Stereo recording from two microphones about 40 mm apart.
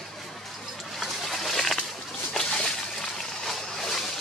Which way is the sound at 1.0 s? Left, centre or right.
Centre.